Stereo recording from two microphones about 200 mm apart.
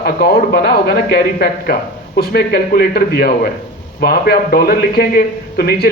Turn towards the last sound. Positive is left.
turn(degrees=50)  # may be behind; listen again after turning